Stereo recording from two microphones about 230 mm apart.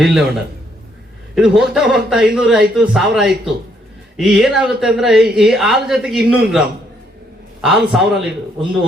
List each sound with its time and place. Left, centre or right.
0.0 s speech: centre
1.4 s speech: centre